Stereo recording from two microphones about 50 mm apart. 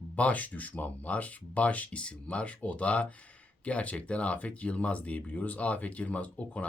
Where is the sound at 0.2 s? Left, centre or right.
Left.